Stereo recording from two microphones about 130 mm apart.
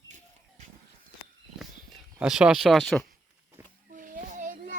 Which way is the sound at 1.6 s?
Centre (ahead or behind).